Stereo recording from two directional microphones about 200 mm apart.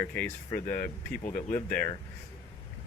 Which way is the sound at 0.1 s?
10° left (ahead or behind).